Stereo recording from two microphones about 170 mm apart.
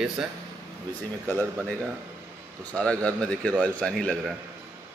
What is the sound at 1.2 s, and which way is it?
Speech, 10° left (ahead or behind).